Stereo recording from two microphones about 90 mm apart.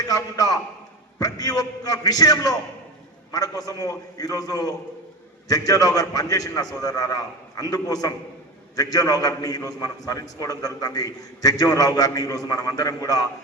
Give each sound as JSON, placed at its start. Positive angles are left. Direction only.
{"t": 0.0, "sound": "a man's voice", "side_deg": 40}